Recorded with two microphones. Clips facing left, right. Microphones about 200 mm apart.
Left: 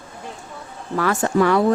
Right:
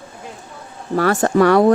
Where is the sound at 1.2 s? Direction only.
70° right (ahead or behind).